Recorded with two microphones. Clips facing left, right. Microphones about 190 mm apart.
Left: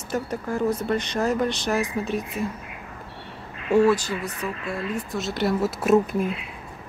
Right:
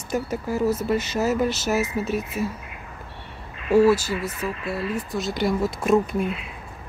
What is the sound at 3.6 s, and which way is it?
Speech, 5° right (ahead or behind).